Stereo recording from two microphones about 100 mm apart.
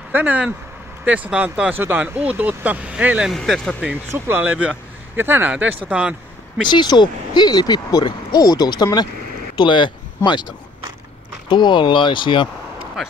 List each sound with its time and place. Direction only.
0.1 s speech: 15° right (ahead or behind)
3.3 s speech: centre (ahead or behind)
4.1 s speech: 20° right (ahead or behind)
6.7 s speech: 50° left (ahead or behind)
9.6 s speech: 50° left (ahead or behind)
11.4 s speech: 50° left (ahead or behind)